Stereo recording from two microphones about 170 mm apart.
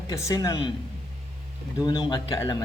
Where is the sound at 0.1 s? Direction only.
20° left (ahead or behind).